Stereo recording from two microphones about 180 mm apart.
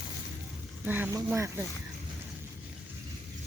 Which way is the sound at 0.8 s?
10° right (ahead or behind).